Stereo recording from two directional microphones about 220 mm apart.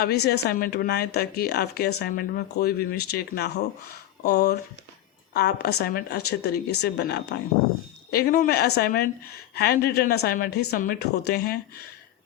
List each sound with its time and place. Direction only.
0.3 s a woman's voice: 45° left (ahead or behind)